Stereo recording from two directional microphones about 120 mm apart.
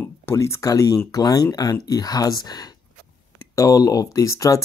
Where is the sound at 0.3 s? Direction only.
20° left (ahead or behind).